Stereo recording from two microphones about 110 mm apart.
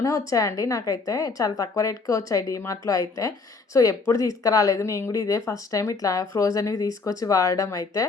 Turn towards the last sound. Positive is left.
turn(degrees=35)  # may be behind; listen again after turning